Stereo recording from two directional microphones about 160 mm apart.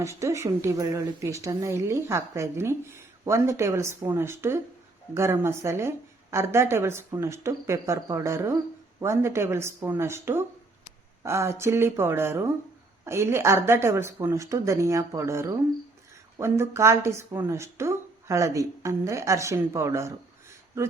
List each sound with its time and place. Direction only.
0.0 s speech: 20° right (ahead or behind)